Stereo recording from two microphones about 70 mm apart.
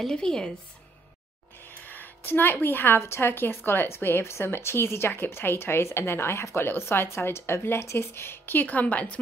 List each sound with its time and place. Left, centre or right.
0.0 s a woman's voice: centre
1.9 s a woman's voice: left